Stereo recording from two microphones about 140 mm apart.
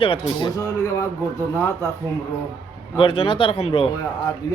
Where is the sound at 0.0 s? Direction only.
35° left (ahead or behind); by 1.9 s 20° left (ahead or behind).